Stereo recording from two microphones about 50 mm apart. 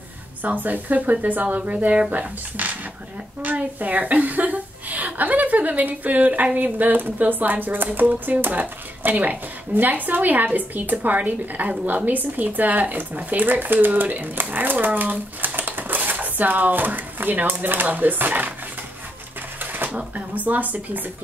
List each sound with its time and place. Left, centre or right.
0.4 s a woman's voice: right
19.6 s a sound: right
19.9 s a woman's voice: right